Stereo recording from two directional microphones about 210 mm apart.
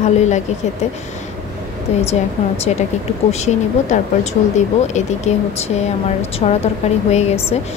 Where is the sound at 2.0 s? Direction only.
30° left (ahead or behind).